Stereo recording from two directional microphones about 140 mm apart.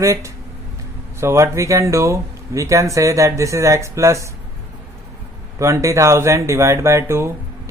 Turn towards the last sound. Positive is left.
turn(degrees=-20)  # may be behind; listen again after turning